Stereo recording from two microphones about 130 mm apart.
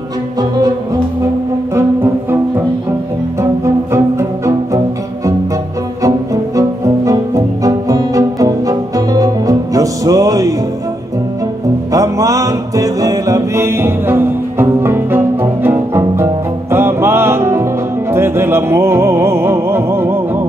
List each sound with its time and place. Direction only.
3.3 s music: 20° right (ahead or behind)
6.0 s music: 25° right (ahead or behind)
11.9 s music: 25° right (ahead or behind)